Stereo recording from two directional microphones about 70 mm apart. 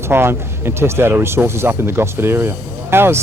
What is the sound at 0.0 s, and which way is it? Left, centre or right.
Speech, right.